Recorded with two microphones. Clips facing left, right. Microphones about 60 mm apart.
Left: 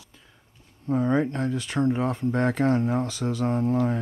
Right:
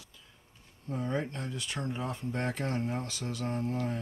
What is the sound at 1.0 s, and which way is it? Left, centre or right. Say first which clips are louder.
Speech: left 9 dB; left.